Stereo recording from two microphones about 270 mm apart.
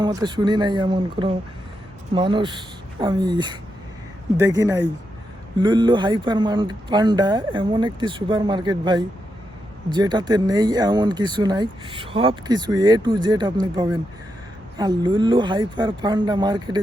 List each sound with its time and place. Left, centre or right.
0.0 s speech: centre